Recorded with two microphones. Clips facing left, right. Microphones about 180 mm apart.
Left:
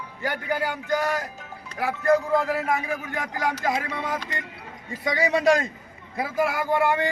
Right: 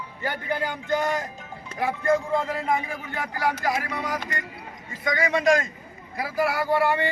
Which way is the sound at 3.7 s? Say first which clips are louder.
Even; 25° left (ahead or behind).